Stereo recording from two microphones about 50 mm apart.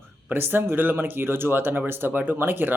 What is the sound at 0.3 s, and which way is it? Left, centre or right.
Speech, right.